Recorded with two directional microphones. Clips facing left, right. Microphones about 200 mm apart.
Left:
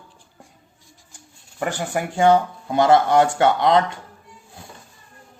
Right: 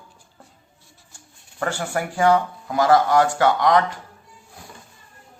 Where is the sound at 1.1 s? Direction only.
15° left (ahead or behind).